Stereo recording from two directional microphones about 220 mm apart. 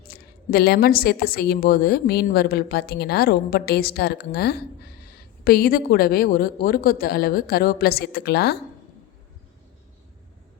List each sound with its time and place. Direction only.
0.1 s a woman's voice: 45° left (ahead or behind)